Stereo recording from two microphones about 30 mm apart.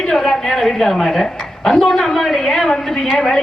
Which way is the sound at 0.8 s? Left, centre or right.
Centre.